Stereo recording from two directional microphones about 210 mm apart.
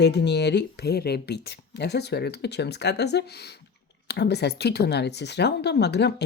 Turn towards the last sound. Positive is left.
turn(degrees=55)  # may be behind; listen again after turning